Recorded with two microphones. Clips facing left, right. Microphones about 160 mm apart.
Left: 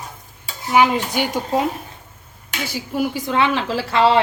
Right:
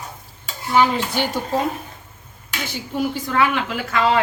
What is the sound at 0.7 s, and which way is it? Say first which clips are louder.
Speech: left 2 dB; 15° left (ahead or behind).